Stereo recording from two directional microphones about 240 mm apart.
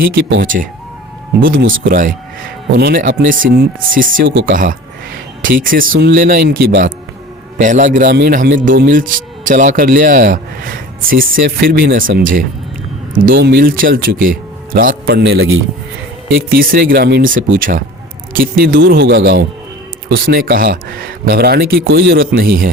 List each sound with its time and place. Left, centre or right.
0.1 s speech: right
0.4 s speech: right
4.3 s speech: right
4.5 s speech: right
13.3 s speech: right